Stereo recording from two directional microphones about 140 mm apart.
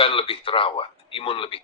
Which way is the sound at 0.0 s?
40° left (ahead or behind).